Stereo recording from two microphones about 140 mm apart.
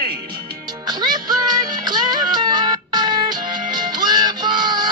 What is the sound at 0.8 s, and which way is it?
Music, 30° right (ahead or behind).